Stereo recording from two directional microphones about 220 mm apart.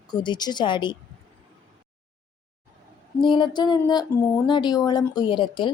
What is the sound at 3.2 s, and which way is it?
Speech, 20° left (ahead or behind).